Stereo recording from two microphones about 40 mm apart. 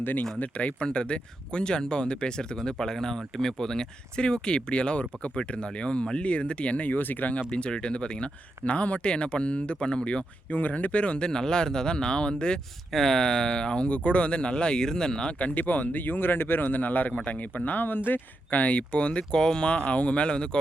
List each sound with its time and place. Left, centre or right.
0.0 s speech: left
0.3 s speech: left
6.9 s speech: left
7.5 s speech: left
10.5 s speech: left
11.3 s speech: centre
12.9 s speech: centre
15.4 s speech: left
15.6 s speech: left
18.5 s speech: left